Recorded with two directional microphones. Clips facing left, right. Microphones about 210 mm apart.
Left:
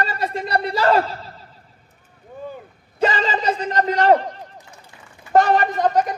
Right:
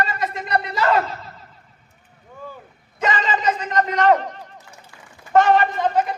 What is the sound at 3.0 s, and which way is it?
Speech, 30° left (ahead or behind).